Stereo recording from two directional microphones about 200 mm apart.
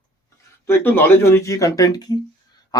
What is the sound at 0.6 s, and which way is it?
Speech, 10° left (ahead or behind).